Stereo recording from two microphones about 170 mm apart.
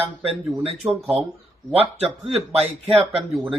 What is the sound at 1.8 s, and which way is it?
Speech, 35° right (ahead or behind).